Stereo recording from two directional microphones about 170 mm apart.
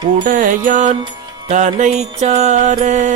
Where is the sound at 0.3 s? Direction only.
50° right (ahead or behind).